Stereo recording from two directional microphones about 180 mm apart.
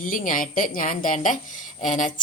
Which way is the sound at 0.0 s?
50° left (ahead or behind).